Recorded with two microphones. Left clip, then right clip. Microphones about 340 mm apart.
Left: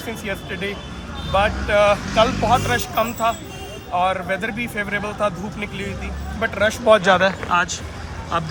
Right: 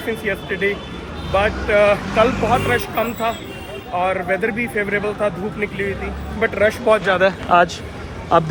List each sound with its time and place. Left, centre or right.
0.3 s speech: centre
7.2 s speech: centre